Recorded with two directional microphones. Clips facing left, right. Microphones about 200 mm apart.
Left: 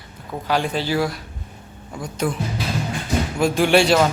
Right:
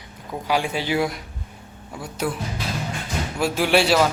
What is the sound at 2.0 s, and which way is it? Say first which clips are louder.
Speech: left 2 dB; 5° right (ahead or behind).